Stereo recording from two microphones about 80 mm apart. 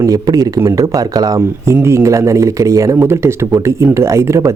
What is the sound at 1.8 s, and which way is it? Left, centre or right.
Speech, right.